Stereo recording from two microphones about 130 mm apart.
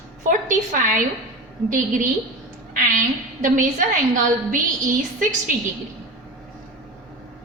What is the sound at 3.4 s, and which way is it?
A woman's voice, 85° right.